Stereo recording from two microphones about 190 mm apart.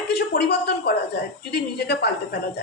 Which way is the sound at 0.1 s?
60° left (ahead or behind).